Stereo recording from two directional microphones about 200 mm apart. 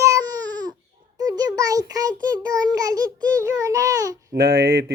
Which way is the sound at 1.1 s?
20° right (ahead or behind).